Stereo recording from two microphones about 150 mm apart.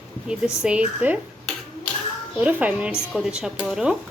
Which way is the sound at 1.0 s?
10° right (ahead or behind).